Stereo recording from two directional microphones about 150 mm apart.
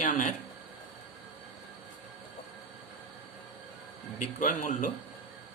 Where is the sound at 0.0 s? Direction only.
55° left (ahead or behind).